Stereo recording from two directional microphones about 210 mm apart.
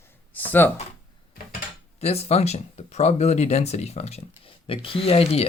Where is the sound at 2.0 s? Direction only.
30° left (ahead or behind).